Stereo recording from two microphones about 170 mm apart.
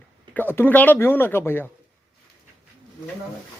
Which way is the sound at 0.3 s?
10° left (ahead or behind).